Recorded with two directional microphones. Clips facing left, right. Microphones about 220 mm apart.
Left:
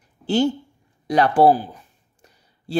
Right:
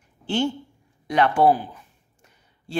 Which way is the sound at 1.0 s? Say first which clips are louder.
Left 3 dB; 35° left (ahead or behind).